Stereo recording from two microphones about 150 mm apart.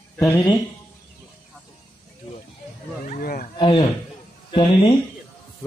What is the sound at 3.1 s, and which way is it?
Speech, 75° left (ahead or behind).